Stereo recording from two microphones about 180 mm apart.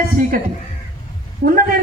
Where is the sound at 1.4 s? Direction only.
55° right (ahead or behind).